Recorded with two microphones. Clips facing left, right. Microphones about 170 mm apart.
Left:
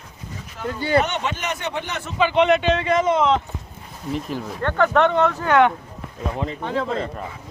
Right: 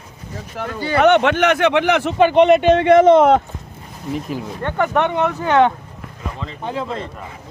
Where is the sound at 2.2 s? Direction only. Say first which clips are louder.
Right 5 dB; 45° right (ahead or behind).